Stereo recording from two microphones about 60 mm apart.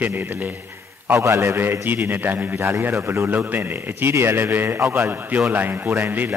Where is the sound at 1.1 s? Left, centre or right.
Right.